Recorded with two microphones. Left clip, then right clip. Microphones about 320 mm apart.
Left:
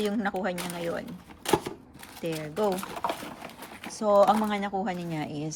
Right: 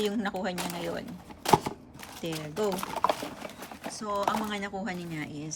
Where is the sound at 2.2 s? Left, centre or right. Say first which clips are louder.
Left 3 dB; centre.